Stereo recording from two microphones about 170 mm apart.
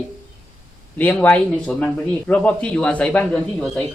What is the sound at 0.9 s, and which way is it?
A man's voice, 10° left (ahead or behind).